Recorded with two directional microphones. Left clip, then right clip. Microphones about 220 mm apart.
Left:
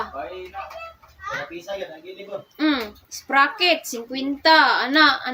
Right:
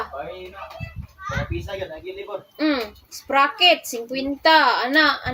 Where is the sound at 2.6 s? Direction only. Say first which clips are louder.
Even; 15° left (ahead or behind).